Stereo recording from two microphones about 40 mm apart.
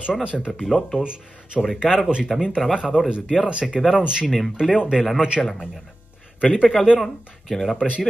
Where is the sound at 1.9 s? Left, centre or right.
Centre.